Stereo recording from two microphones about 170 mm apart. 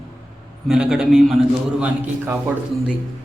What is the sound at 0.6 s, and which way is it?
A man's voice, 5° right (ahead or behind).